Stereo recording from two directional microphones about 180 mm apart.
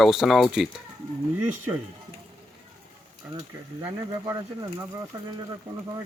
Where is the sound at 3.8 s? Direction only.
20° right (ahead or behind).